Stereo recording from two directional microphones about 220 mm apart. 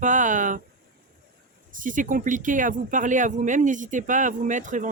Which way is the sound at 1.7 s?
35° right (ahead or behind).